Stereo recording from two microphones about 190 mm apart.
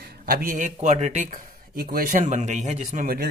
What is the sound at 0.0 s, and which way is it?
Speech, 55° right (ahead or behind).